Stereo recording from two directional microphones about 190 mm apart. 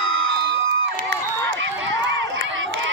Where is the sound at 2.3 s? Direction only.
90° right.